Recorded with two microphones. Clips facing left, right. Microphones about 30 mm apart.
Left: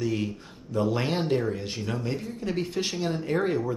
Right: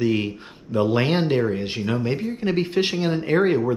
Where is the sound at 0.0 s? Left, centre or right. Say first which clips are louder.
Right 6 dB; right.